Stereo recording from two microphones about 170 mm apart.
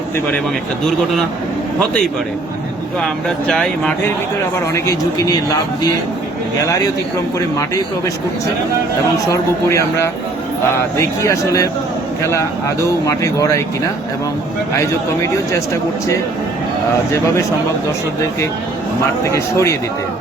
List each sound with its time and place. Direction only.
3.0 s speech: 5° left (ahead or behind)
4.7 s speech: 20° left (ahead or behind)
9.3 s speech: 15° left (ahead or behind)
19.2 s speech: 15° left (ahead or behind)